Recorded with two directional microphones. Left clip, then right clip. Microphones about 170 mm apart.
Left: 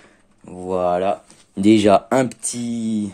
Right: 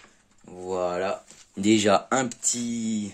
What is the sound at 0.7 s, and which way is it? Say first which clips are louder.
Speech: left 8 dB; 45° left (ahead or behind).